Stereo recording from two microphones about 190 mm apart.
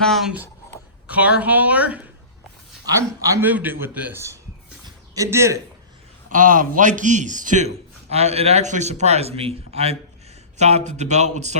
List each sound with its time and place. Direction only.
0.0 s a man's voice: centre (ahead or behind)
3.3 s a man's voice: 10° right (ahead or behind)
6.3 s a man's voice: 45° right (ahead or behind)